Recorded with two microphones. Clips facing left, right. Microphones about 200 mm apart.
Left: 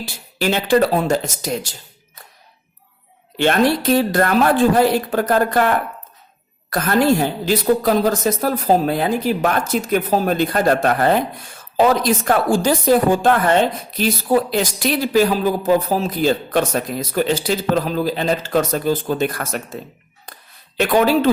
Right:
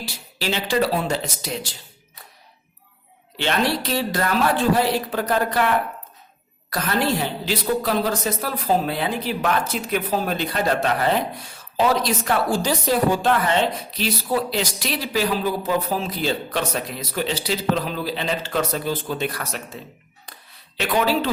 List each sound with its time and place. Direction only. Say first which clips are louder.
0.3 s a woman's voice: left 6 dB; 50° left (ahead or behind)
3.3 s a woman's voice: left 6 dB; 50° left (ahead or behind)
20.2 s a sound: left 4 dB; 45° left (ahead or behind)